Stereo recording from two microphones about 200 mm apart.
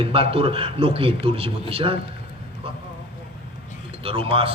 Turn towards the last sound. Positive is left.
turn(degrees=-30)  # may be behind; listen again after turning